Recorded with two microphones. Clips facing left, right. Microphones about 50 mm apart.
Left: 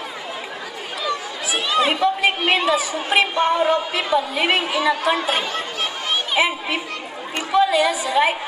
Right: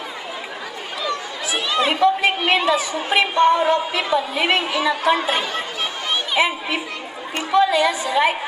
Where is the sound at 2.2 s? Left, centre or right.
Centre.